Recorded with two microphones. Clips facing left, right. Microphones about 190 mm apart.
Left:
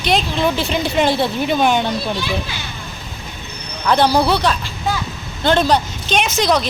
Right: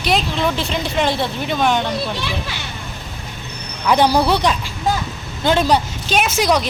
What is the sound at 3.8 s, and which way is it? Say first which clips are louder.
Speech: even; 10° right (ahead or behind).